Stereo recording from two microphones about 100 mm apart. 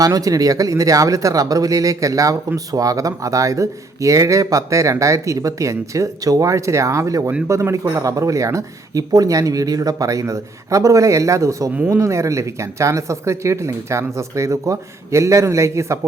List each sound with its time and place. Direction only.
0.0 s speech: 35° right (ahead or behind)
11.7 s speech: 15° right (ahead or behind)
11.9 s speech: 30° right (ahead or behind)